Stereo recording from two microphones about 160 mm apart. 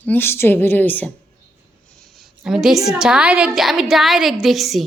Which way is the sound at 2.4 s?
5° right (ahead or behind).